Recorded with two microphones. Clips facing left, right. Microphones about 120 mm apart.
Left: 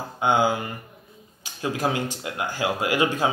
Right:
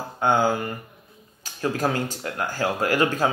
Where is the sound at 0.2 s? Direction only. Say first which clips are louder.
Even; 15° left (ahead or behind).